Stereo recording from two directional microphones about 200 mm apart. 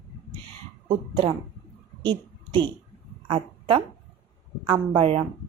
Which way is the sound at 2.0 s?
25° right (ahead or behind).